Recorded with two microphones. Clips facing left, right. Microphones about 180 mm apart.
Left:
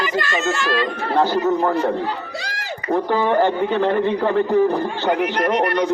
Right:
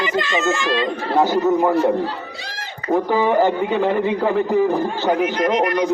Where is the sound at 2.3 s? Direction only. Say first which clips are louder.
Left 4 dB; 85° left.